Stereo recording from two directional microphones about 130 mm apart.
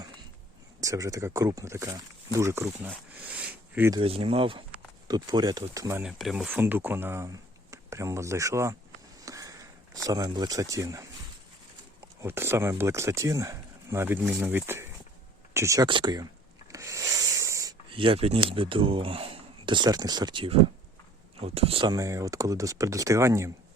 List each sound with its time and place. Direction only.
0.8 s speech: 25° right (ahead or behind)
3.2 s a sound: 10° right (ahead or behind)
4.0 s speech: 45° right (ahead or behind)
5.0 s speech: 30° right (ahead or behind)
6.0 s speech: 5° right (ahead or behind)
6.6 s speech: 15° right (ahead or behind)
9.2 s a sound: 25° right (ahead or behind)
11.9 s speech: 20° right (ahead or behind)
15.9 s speech: 35° right (ahead or behind)
16.7 s rub: 25° right (ahead or behind)
17.8 s speech: 40° right (ahead or behind)
21.8 s speech: 25° right (ahead or behind)